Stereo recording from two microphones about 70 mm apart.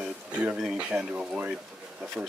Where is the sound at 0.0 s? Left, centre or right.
Centre.